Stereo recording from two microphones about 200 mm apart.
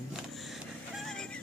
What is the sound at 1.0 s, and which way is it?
Vehicle, centre (ahead or behind).